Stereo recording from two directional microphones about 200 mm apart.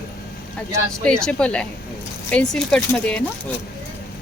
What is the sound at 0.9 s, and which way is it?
Speech, 5° left (ahead or behind).